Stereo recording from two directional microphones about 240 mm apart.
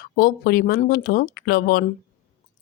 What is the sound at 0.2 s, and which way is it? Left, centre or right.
Speech, left.